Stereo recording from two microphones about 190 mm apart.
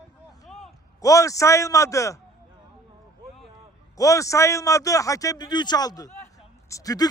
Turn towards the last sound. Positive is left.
turn(degrees=20)  # may be behind; listen again after turning